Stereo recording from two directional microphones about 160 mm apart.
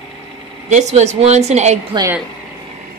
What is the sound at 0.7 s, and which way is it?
A woman's voice, 45° right (ahead or behind).